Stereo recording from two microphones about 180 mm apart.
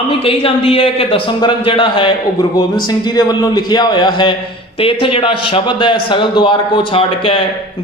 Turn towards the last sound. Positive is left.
turn(degrees=30)  # may be behind; listen again after turning